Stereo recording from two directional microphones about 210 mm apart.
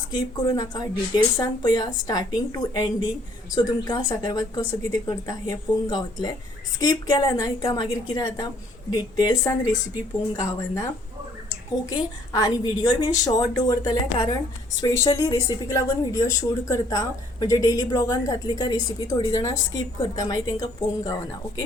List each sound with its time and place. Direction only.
0.1 s a woman's voice: 20° left (ahead or behind)
11.9 s speech: 20° left (ahead or behind)